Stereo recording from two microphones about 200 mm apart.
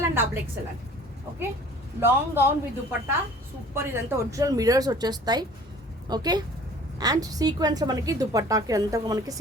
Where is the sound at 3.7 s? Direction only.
10° right (ahead or behind).